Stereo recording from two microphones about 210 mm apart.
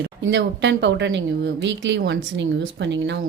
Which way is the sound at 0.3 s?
55° right (ahead or behind).